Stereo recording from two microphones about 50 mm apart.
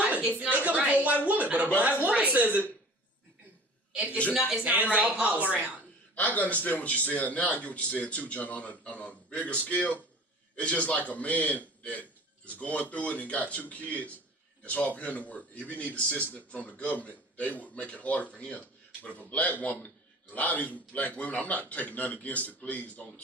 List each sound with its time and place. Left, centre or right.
0.0 s a sound: right
0.6 s a woman's voice: right
4.4 s speech: centre
4.6 s a woman's voice: right
6.1 s a man's voice: left